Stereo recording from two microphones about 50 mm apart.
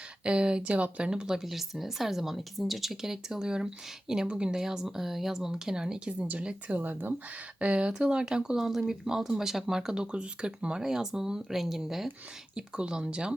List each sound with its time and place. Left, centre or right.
0.3 s speech: centre
6.1 s speech: right
6.4 s speech: centre
6.7 s speech: right
7.6 s speech: centre
12.5 s speech: centre